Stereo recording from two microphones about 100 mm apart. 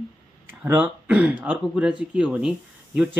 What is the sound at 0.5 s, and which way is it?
Speech, 20° right (ahead or behind).